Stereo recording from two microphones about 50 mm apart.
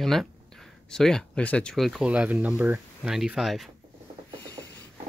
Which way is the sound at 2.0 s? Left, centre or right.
Right.